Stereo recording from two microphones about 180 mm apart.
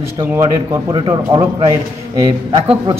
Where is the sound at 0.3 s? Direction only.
20° right (ahead or behind).